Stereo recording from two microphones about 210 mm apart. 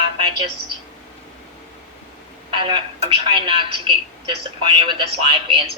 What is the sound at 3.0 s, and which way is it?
Speech, 25° right (ahead or behind).